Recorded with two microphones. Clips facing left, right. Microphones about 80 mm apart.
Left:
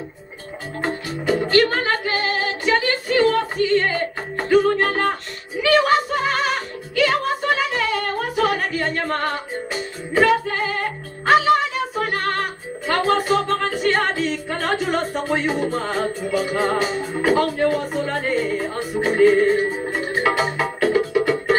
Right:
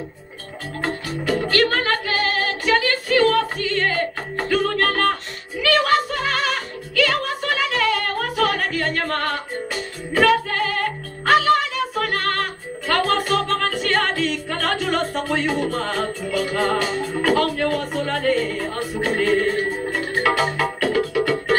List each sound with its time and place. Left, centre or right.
0.8 s music: centre
16.3 s speech: centre
19.9 s music: left